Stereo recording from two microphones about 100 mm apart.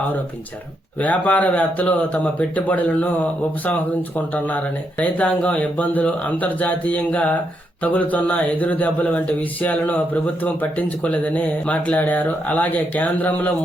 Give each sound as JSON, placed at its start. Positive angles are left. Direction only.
{"t": 0.9, "sound": "speech", "side_deg": 15}